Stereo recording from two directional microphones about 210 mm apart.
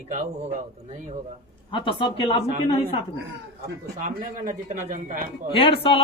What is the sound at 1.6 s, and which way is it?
Speech, 25° left (ahead or behind).